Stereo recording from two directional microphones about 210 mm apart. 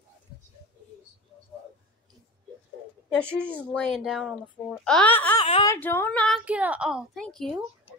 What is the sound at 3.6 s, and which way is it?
A woman's voice, 5° left (ahead or behind).